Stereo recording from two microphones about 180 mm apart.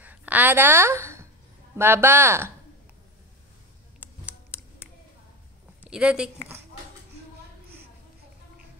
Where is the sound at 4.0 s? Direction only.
10° right (ahead or behind).